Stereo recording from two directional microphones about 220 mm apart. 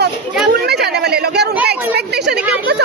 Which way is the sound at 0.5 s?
50° right (ahead or behind).